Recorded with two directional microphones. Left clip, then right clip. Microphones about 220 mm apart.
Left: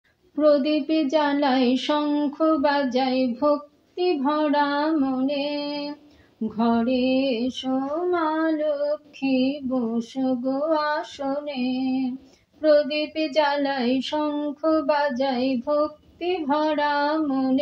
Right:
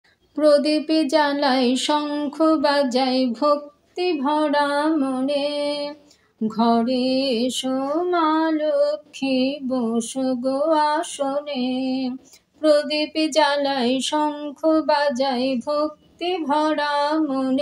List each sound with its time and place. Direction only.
0.4 s music: 40° right (ahead or behind)